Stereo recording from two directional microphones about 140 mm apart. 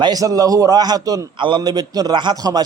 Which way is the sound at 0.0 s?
25° right (ahead or behind).